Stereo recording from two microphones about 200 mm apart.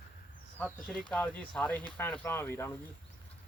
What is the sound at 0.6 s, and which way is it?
Speech, centre (ahead or behind).